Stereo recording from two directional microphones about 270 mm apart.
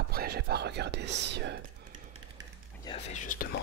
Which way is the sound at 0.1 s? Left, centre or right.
Right.